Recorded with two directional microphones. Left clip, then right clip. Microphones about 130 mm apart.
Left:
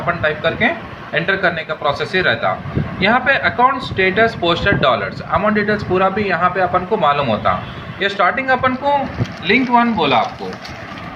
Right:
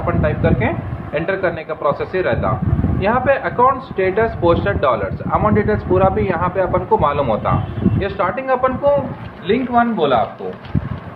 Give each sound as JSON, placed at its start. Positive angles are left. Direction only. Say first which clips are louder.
{"t": 0.2, "sound": "speech", "louder": "left 1 dB", "side_deg": -20}
{"t": 9.5, "sound": "speech", "louder": "left 2 dB", "side_deg": -50}